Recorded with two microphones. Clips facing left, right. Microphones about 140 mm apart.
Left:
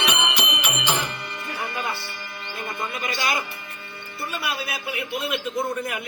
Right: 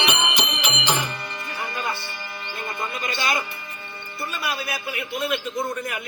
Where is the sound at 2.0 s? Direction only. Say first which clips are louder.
Right 1 dB; 25° right (ahead or behind).